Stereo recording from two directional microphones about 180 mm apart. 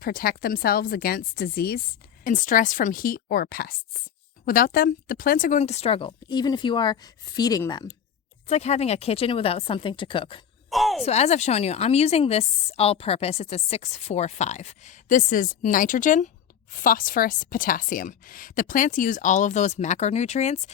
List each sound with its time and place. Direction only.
0.0 s a woman's voice: 55° left (ahead or behind)
5.5 s a woman's voice: 35° left (ahead or behind)
8.4 s a woman's voice: 35° left (ahead or behind)
10.7 s a sound: centre (ahead or behind)
11.0 s a woman's voice: 35° left (ahead or behind)